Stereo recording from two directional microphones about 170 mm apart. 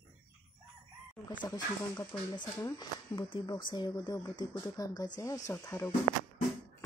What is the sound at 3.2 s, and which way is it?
Speech, 30° left (ahead or behind).